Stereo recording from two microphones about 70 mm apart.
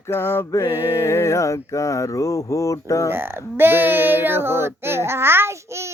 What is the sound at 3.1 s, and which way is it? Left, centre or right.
Speech, right.